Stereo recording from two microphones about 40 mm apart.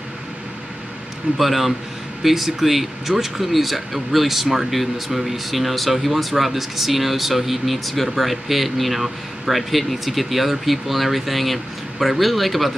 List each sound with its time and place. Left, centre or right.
1.4 s speech: centre